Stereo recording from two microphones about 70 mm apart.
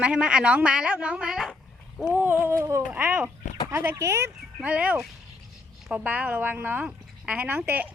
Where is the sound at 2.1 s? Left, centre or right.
Right.